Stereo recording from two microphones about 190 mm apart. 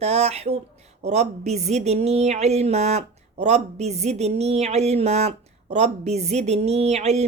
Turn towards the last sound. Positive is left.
turn(degrees=-35)  # may be behind; listen again after turning